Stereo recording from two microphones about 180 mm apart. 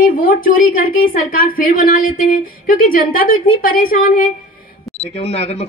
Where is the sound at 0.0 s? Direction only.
50° left (ahead or behind).